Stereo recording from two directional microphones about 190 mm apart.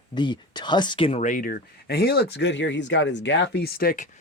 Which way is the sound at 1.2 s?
45° left (ahead or behind).